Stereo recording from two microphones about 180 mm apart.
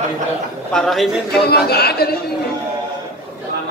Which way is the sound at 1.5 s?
60° left (ahead or behind).